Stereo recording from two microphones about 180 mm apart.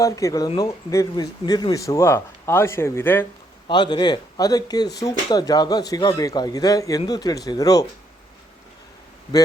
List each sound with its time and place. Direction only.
0.0 s speech: 15° left (ahead or behind)
3.7 s speech: 25° left (ahead or behind)